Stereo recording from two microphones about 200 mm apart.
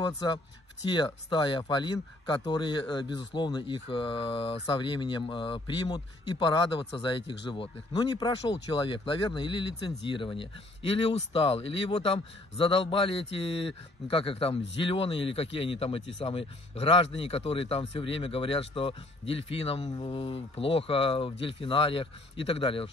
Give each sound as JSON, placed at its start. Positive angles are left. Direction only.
{"t": 0.2, "sound": "speech", "side_deg": 20}